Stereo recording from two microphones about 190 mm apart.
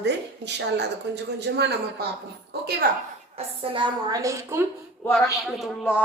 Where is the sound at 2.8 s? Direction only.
50° right (ahead or behind).